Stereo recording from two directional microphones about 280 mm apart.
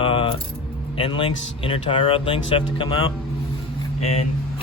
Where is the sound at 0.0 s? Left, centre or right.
Centre.